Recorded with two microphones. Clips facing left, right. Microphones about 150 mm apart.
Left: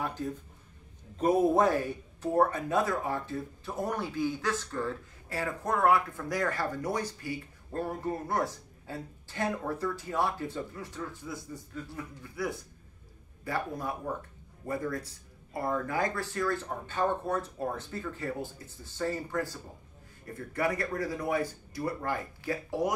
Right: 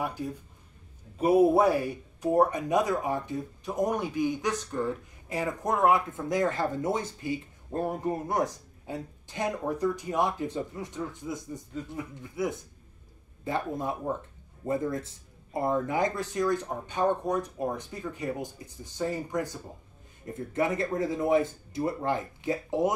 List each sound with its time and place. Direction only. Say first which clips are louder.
0.0 s speech: right 1 dB; 10° right (ahead or behind)